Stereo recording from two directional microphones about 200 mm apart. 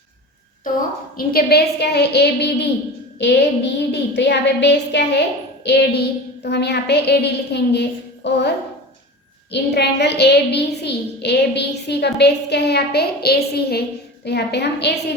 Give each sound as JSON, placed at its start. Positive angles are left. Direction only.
{"t": 0.6, "sound": "a child's voice", "side_deg": 45}